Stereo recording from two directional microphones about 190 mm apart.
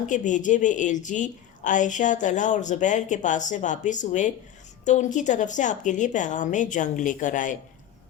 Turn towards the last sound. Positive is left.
turn(degrees=45)  # may be behind; listen again after turning